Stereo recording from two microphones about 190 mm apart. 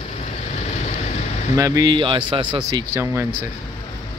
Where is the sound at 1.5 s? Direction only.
15° right (ahead or behind).